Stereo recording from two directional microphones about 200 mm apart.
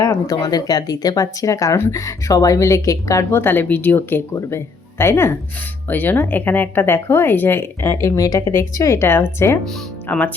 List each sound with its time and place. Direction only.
0.0 s speech: 20° left (ahead or behind)